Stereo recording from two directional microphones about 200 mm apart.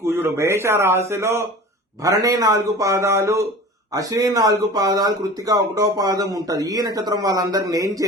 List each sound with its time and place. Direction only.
0.0 s a man's voice: 15° right (ahead or behind)